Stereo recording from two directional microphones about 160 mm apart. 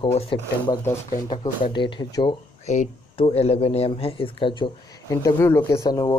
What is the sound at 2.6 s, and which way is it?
Speech, 40° left (ahead or behind).